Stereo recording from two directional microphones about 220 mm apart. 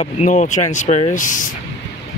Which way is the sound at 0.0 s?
35° left (ahead or behind).